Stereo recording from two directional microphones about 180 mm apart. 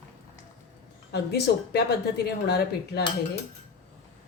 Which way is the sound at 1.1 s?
65° left (ahead or behind).